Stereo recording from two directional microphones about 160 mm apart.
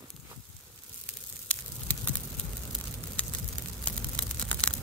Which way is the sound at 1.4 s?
10° left (ahead or behind).